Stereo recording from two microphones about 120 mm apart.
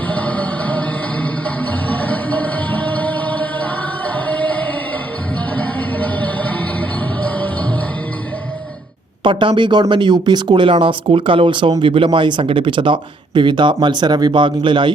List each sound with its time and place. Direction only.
0.1 s music: 10° left (ahead or behind)
9.2 s speech: 40° right (ahead or behind)